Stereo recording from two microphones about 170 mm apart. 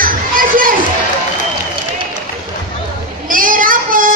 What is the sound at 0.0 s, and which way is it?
Children playing, 55° right (ahead or behind).